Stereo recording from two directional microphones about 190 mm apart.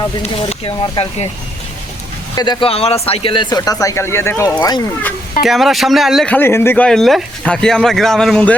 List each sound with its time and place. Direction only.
0.6 s speech: 30° left (ahead or behind)
2.3 s speech: 25° left (ahead or behind)
5.4 s speech: centre (ahead or behind)